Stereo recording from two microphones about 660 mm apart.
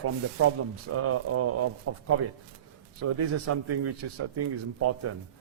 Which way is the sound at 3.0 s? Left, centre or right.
Right.